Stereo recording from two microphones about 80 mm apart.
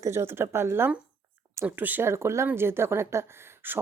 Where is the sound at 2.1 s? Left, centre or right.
Right.